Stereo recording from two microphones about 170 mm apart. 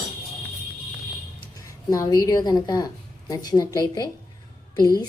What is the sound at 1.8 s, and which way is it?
A woman's voice, 20° left (ahead or behind).